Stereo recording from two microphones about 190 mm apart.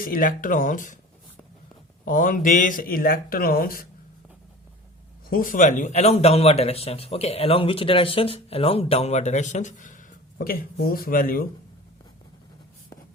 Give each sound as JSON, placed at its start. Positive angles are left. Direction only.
{"t": 0.0, "sound": "speech", "side_deg": 45}
{"t": 2.0, "sound": "speech", "side_deg": 45}
{"t": 5.3, "sound": "a man's voice", "side_deg": 45}